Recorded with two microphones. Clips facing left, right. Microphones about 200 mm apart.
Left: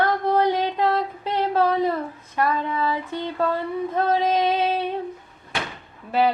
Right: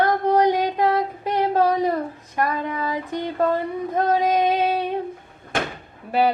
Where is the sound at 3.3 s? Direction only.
45° right (ahead or behind).